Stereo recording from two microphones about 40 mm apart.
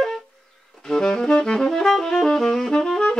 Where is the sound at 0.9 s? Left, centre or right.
Centre.